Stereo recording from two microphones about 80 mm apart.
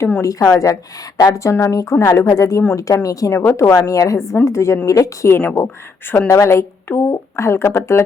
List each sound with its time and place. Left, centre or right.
0.2 s a woman's voice: left